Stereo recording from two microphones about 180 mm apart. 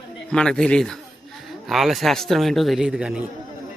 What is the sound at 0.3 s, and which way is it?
A man's voice, 5° left (ahead or behind).